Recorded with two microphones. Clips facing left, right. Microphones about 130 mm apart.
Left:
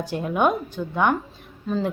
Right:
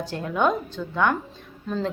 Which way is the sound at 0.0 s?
15° left (ahead or behind).